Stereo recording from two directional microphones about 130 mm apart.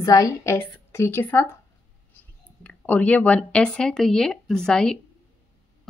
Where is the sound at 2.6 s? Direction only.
10° left (ahead or behind).